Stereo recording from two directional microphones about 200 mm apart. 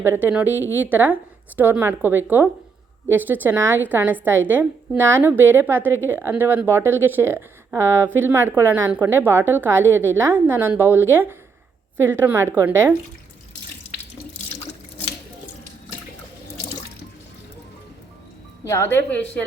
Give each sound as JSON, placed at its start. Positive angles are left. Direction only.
{"t": 0.0, "sound": "a woman's voice", "side_deg": -10}
{"t": 18.6, "sound": "a woman's voice", "side_deg": 15}